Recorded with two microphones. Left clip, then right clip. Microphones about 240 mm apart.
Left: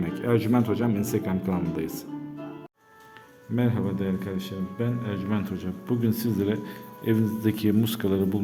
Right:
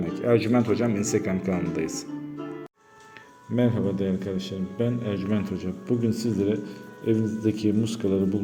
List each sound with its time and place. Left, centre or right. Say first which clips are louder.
0.0 s speech: right 3 dB; centre
3.5 s a man's voice: right 3 dB; centre